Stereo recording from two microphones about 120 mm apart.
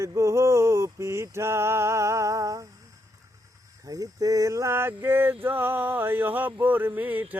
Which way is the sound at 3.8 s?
30° right (ahead or behind).